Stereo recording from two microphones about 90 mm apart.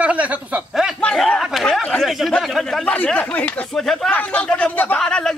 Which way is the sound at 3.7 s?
5° left (ahead or behind).